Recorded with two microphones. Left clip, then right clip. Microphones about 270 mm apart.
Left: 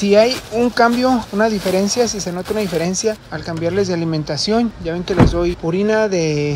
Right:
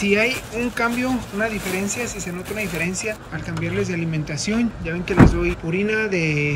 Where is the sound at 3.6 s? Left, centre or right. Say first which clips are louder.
Left 7 dB; centre.